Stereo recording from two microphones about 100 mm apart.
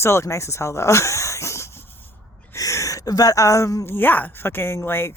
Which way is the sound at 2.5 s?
35° left (ahead or behind).